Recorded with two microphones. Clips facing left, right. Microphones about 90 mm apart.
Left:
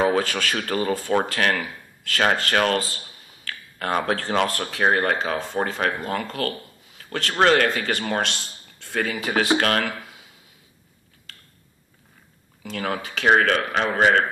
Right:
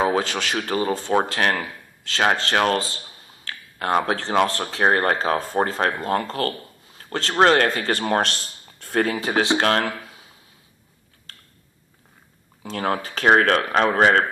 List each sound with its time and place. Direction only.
0.1 s speech: 20° right (ahead or behind)
3.4 s a sound: 20° right (ahead or behind)
4.0 s speech: 20° right (ahead or behind); by 8.3 s 40° right (ahead or behind)
8.7 s a sound: 45° right (ahead or behind)
9.1 s speech: 30° right (ahead or behind)
12.6 s speech: 35° right (ahead or behind)